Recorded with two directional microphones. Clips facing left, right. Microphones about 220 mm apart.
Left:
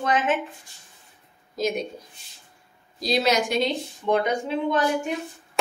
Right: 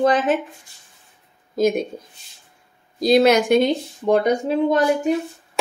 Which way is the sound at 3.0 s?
55° right (ahead or behind).